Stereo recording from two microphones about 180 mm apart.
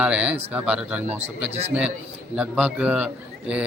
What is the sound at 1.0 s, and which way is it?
Speech, 35° right (ahead or behind).